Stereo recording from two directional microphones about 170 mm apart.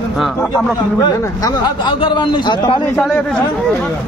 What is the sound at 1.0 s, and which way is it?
A man's voice, 25° left (ahead or behind).